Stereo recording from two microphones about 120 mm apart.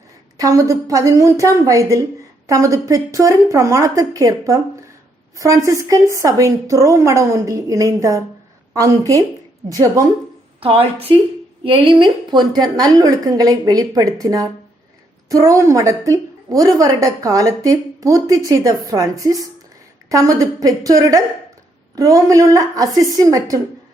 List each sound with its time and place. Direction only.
0.3 s a woman's voice: 30° right (ahead or behind)
10.6 s a woman's voice: 50° right (ahead or behind); by 23.6 s 30° right (ahead or behind)